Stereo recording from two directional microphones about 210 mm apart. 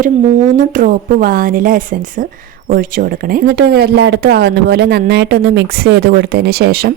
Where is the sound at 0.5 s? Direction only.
40° right (ahead or behind).